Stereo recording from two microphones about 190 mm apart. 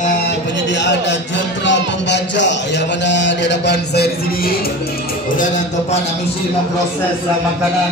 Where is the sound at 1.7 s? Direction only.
70° left (ahead or behind).